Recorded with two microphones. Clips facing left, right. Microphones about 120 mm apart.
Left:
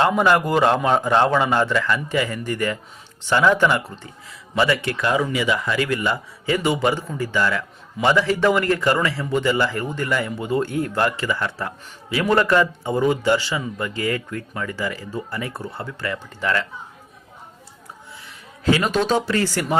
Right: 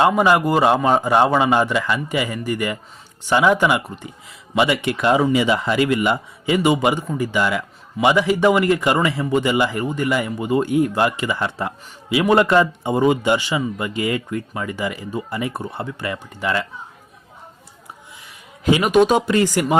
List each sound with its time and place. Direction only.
0.0 s speech: 10° right (ahead or behind)
18.6 s speech: 15° right (ahead or behind)